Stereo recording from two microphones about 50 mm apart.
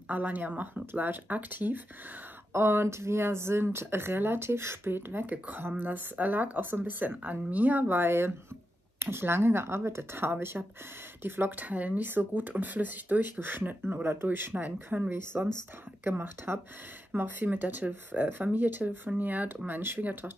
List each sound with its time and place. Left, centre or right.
0.1 s speech: right
2.5 s speech: right
11.6 s speech: right
15.0 s speech: right
17.1 s speech: right